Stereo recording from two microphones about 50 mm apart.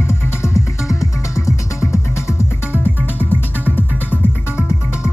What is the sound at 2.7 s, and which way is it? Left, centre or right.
Music, right.